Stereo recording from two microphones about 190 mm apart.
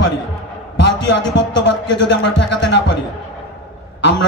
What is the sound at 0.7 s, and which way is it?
A man's voice, 65° left (ahead or behind).